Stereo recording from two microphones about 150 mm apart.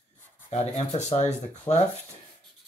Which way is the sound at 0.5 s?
50° left (ahead or behind).